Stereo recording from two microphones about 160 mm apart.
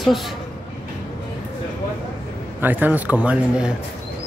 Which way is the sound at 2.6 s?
10° right (ahead or behind).